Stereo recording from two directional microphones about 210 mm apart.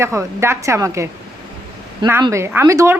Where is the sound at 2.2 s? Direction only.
15° right (ahead or behind).